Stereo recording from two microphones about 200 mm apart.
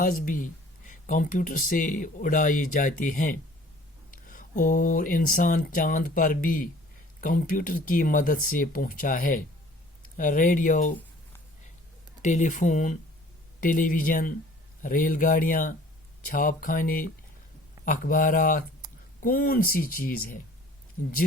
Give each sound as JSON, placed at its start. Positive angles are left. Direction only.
{"t": 0.0, "sound": "speech", "side_deg": 45}
{"t": 12.2, "sound": "speech", "side_deg": 35}